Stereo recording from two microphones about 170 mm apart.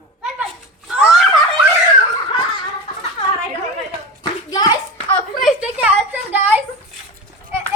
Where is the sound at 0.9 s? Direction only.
Centre (ahead or behind).